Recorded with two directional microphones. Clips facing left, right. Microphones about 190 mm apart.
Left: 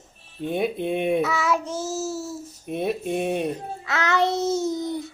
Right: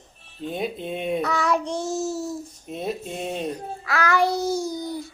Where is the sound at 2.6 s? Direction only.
60° left (ahead or behind).